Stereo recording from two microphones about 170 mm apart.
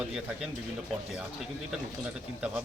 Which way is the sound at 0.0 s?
5° right (ahead or behind).